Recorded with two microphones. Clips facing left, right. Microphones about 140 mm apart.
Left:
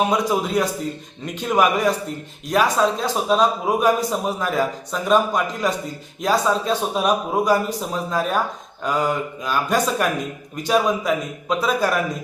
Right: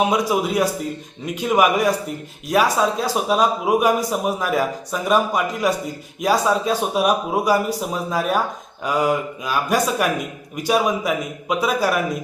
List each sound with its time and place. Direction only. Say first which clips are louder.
0.0 s a man's voice: right 1 dB; 10° right (ahead or behind)